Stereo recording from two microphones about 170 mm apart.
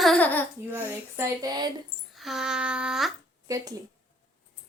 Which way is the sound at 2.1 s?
Centre (ahead or behind).